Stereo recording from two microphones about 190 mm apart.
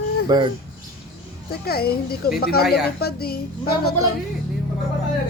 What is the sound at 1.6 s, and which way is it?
A woman's voice, 55° left (ahead or behind).